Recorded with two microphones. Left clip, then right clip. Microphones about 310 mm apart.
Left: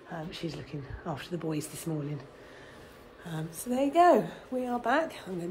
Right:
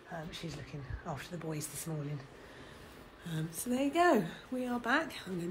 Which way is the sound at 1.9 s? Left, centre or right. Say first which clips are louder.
Left 8 dB; left.